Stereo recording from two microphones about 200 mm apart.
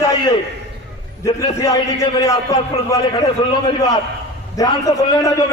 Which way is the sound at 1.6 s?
15° left (ahead or behind).